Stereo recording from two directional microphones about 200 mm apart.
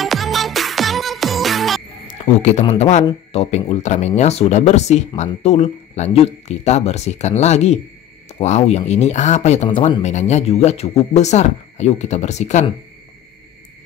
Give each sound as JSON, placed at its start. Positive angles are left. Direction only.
{"t": 0.0, "sound": "music", "side_deg": 0}
{"t": 2.6, "sound": "speech", "side_deg": 30}